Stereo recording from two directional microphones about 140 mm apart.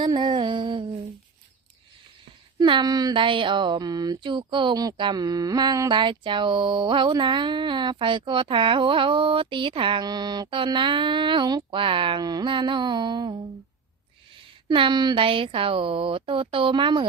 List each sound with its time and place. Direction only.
0.0 s a sound: 30° right (ahead or behind)
2.6 s speech: 30° right (ahead or behind)
14.7 s speech: 35° right (ahead or behind)